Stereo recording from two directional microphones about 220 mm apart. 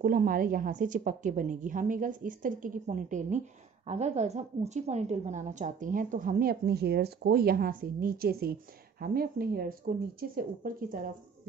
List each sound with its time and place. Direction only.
0.0 s a woman's voice: 40° right (ahead or behind)